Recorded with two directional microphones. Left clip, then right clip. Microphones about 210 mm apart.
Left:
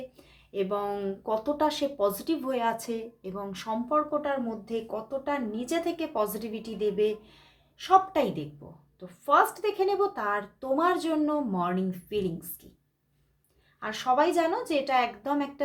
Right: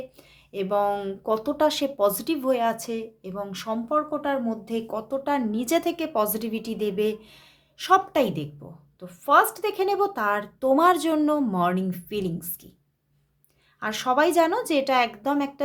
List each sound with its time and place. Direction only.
0.2 s speech: 25° right (ahead or behind)
13.7 s speech: 35° right (ahead or behind)